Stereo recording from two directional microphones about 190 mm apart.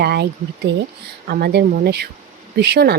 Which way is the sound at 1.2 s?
55° right (ahead or behind).